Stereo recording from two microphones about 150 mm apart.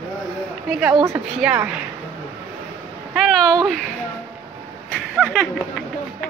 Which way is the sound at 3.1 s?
Centre (ahead or behind).